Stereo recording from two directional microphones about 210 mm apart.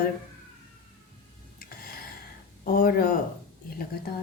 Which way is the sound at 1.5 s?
45° left (ahead or behind).